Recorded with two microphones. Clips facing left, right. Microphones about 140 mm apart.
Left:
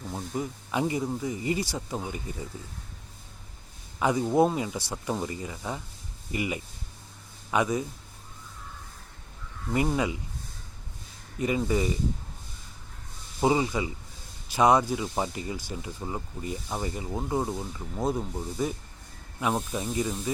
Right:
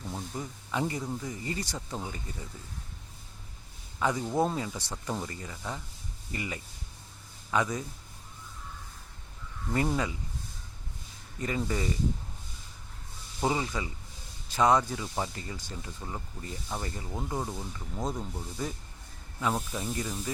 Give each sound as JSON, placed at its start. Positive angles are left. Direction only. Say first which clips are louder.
{"t": 0.0, "sound": "speech", "louder": "left 5 dB", "side_deg": 15}
{"t": 4.0, "sound": "speech", "louder": "left 5 dB", "side_deg": 15}
{"t": 9.6, "sound": "speech", "louder": "left 3 dB", "side_deg": 10}
{"t": 11.3, "sound": "speech", "louder": "left 5 dB", "side_deg": 10}
{"t": 13.4, "sound": "speech", "louder": "left 5 dB", "side_deg": 15}